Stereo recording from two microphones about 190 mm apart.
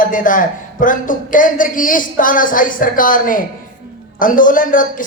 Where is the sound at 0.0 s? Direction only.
45° left (ahead or behind).